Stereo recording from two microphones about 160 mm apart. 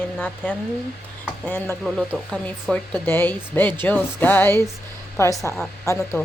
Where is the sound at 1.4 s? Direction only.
10° left (ahead or behind).